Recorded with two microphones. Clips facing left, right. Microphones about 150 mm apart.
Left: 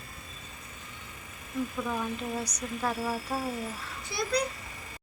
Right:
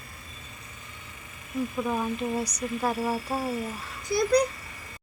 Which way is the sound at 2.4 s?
10° right (ahead or behind).